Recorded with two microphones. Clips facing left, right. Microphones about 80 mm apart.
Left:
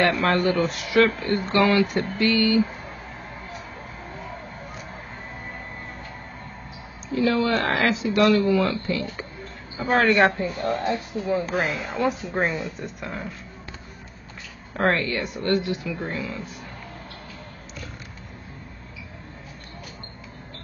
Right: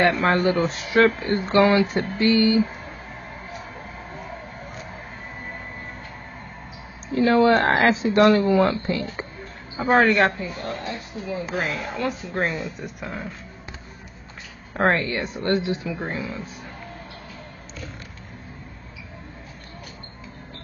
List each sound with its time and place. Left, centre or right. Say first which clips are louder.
0.2 s a woman's voice: right 1 dB; right
7.2 s a woman's voice: right 5 dB; right
10.0 s speech: left 1 dB; centre
10.3 s speech: left 4 dB; left
10.6 s a woman's voice: left 8 dB; left
11.5 s speech: left 1 dB; centre
14.8 s a woman's voice: right 1 dB; right